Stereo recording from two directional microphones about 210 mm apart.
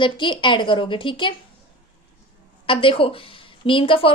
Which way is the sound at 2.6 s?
25° left (ahead or behind).